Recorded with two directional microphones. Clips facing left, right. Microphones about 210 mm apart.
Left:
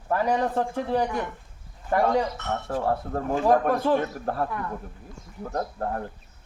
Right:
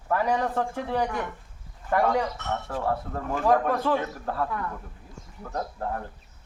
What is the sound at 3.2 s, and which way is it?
Speech, 25° left (ahead or behind).